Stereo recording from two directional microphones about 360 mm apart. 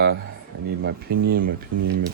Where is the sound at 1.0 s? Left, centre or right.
Right.